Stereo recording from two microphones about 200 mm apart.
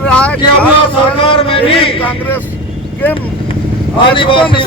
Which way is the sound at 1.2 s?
25° left (ahead or behind).